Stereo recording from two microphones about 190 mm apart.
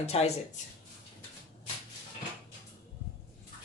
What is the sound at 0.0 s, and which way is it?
Speech, 35° left (ahead or behind).